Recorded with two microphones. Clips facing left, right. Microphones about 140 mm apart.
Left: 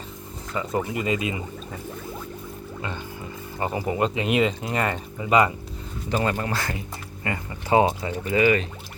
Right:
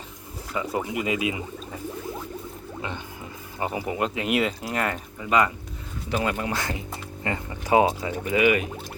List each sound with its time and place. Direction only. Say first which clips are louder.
0.5 s speech: left 1 dB; 5° right (ahead or behind)
3.6 s speech: left 2 dB; 5° right (ahead or behind)
6.1 s speech: left 1 dB; 5° right (ahead or behind)
6.5 s speech: even; 20° right (ahead or behind)